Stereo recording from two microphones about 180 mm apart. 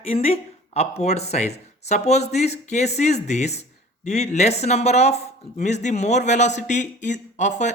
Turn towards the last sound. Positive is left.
turn(degrees=40)  # may be behind; listen again after turning